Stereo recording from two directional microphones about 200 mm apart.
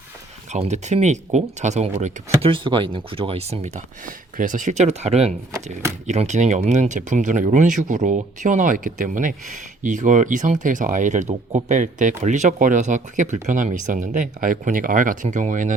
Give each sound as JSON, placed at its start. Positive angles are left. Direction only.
{"t": 0.5, "sound": "speech", "side_deg": -35}